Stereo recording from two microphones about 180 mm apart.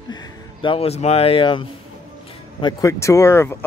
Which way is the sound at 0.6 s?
35° left (ahead or behind).